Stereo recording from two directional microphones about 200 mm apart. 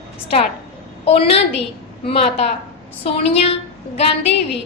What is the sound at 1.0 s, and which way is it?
A woman's voice, 30° left (ahead or behind).